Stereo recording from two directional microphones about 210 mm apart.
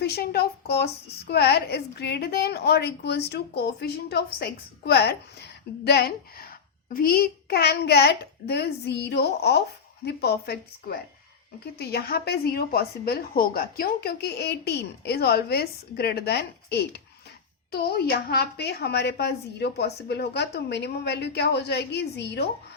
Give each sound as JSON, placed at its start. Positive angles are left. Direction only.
{"t": 0.0, "sound": "a woman's voice", "side_deg": 50}